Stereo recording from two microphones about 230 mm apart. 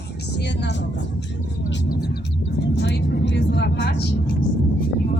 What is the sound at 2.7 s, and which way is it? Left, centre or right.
Vehicle, left.